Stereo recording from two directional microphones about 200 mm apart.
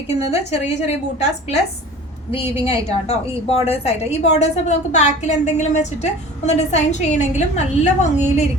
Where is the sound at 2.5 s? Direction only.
30° left (ahead or behind).